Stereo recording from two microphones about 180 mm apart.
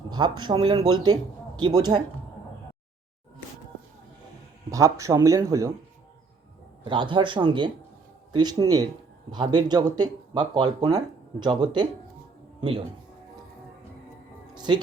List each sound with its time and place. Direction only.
0.1 s speech: 25° right (ahead or behind)
4.7 s speech: 20° right (ahead or behind)
6.8 s speech: 25° right (ahead or behind)
12.5 s music: 30° right (ahead or behind)
14.5 s music: 25° right (ahead or behind)